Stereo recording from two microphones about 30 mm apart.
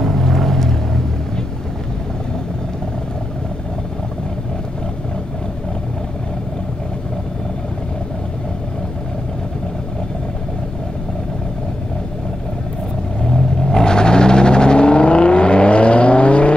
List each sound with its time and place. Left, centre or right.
0.0 s boat: centre
13.2 s vehicle: left